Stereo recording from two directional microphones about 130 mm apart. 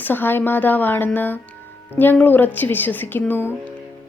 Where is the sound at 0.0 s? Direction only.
15° left (ahead or behind).